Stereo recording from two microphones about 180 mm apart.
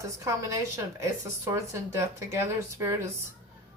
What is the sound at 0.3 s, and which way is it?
Speech, 15° right (ahead or behind).